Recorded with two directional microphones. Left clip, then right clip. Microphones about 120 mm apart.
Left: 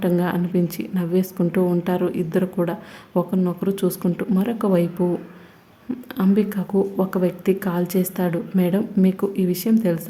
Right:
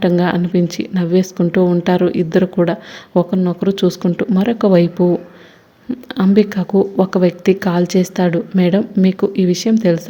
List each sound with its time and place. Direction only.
0.0 s a woman's voice: 30° right (ahead or behind)
1.8 s a woman's voice: 30° right (ahead or behind)
5.9 s speech: 15° right (ahead or behind)
6.3 s a woman's voice: 30° right (ahead or behind)